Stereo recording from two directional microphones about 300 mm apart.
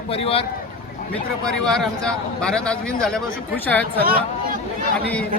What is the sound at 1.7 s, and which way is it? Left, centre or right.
A man's voice, centre.